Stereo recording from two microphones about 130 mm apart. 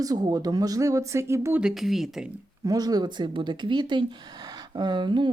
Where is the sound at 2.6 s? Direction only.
30° right (ahead or behind).